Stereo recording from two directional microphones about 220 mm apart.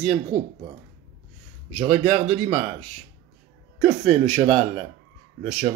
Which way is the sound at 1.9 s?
30° right (ahead or behind).